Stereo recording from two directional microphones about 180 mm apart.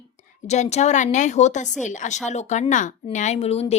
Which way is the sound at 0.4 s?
40° left (ahead or behind).